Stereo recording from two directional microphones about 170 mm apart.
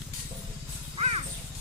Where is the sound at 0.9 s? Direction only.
35° right (ahead or behind).